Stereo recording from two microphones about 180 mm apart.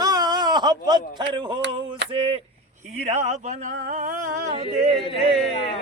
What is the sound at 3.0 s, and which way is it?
Speech, 40° right (ahead or behind).